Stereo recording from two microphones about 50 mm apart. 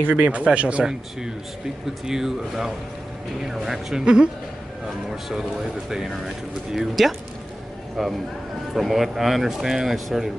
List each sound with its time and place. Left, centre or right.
0.0 s speech: right
2.0 s speech: centre
4.0 s speech: centre
5.9 s speech: centre